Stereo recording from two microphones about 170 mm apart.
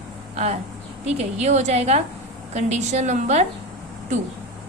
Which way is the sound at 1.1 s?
40° right (ahead or behind).